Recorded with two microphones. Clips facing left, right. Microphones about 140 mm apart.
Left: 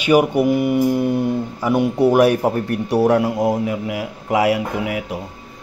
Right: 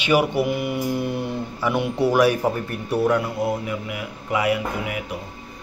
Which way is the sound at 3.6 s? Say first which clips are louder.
Left 6 dB; 90° left.